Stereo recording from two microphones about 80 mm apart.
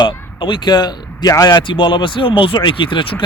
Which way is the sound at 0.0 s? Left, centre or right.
Left.